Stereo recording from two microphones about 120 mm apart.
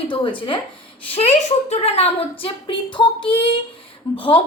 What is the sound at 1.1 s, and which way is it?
A woman's voice, 60° left (ahead or behind).